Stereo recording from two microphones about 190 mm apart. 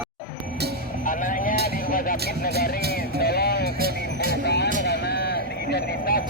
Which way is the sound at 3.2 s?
55° left (ahead or behind).